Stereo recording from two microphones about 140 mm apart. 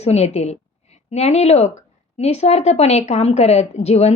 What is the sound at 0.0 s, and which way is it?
A woman's voice, 50° left (ahead or behind).